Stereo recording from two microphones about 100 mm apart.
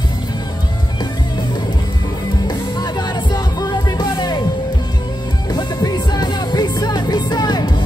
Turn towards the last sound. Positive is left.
turn(degrees=45)  # may be behind; listen again after turning